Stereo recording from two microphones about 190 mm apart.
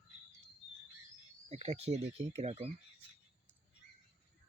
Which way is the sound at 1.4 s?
35° right (ahead or behind).